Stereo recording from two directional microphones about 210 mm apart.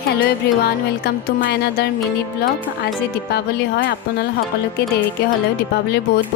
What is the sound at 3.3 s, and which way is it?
Speech, 55° left (ahead or behind).